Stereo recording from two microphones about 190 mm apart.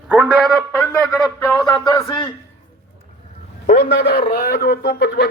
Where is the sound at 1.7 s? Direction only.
20° left (ahead or behind).